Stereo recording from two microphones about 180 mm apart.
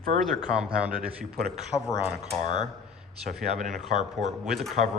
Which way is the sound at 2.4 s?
40° right (ahead or behind).